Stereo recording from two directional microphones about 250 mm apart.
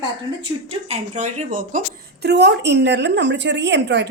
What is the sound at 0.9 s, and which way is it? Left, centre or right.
A woman's voice, right.